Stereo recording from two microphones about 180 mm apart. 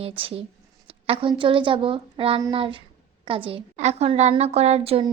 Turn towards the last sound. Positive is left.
turn(degrees=-30)  # may be behind; listen again after turning